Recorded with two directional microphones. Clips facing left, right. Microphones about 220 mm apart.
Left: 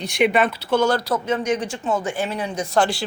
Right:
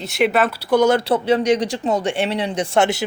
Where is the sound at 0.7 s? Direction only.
20° right (ahead or behind); by 2.0 s 35° right (ahead or behind).